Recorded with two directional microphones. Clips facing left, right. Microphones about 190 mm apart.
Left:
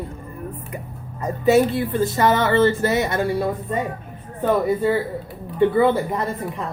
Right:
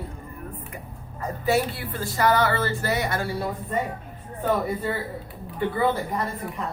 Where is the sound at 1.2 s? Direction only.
20° left (ahead or behind).